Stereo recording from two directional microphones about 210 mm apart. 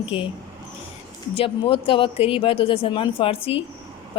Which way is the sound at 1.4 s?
25° left (ahead or behind).